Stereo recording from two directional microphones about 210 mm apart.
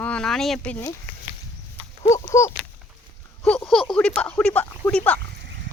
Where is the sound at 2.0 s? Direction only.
15° left (ahead or behind).